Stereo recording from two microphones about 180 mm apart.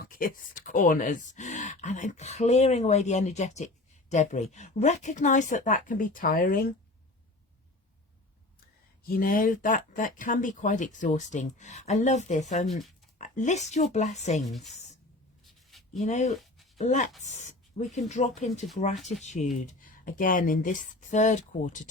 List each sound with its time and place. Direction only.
0.0 s speech: 50° left (ahead or behind)
9.0 s speech: 55° left (ahead or behind)
12.6 s speech: centre (ahead or behind)
13.1 s speech: 45° left (ahead or behind)
14.4 s speech: centre (ahead or behind)
16.0 s speech: 40° left (ahead or behind)
16.3 s a sound: centre (ahead or behind)
16.7 s speech: 40° left (ahead or behind)